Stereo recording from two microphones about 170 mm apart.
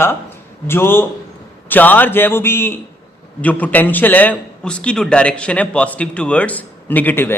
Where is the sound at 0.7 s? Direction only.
15° left (ahead or behind).